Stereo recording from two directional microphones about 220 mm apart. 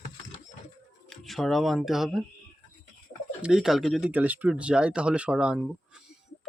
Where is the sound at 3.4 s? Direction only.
5° right (ahead or behind).